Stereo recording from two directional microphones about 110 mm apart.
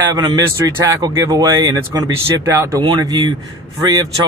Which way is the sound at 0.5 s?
25° right (ahead or behind).